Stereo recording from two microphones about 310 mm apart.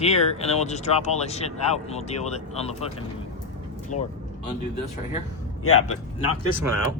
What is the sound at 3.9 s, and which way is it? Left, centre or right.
Speech, left.